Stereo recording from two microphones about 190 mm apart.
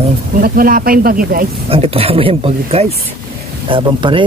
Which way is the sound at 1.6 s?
30° right (ahead or behind).